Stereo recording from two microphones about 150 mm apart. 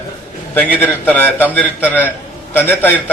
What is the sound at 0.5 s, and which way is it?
A man's voice, 10° left (ahead or behind).